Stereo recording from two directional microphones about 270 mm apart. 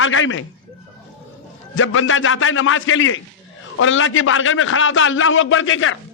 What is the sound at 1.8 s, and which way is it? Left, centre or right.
A man's voice, left.